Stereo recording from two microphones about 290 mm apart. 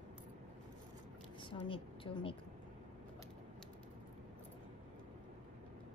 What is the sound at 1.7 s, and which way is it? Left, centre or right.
Speech, centre.